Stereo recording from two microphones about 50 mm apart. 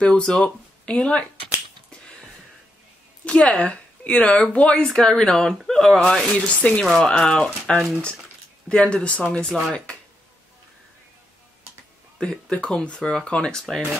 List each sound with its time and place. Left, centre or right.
0.0 s speech: centre
3.3 s speech: left
4.8 s speech: centre
6.4 s speech: left
6.8 s speech: centre
12.2 s speech: centre